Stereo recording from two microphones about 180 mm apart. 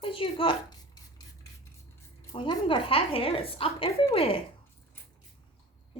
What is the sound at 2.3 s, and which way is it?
A woman's voice, 25° left (ahead or behind).